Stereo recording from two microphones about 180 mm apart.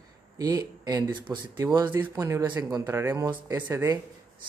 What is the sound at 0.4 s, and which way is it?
Speech, 20° right (ahead or behind).